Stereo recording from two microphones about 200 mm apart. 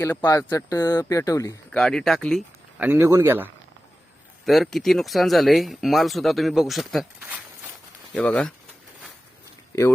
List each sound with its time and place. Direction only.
0.0 s speech: 15° left (ahead or behind)
1.7 s speech: 5° left (ahead or behind)
2.8 s speech: 10° right (ahead or behind)
4.4 s speech: centre (ahead or behind)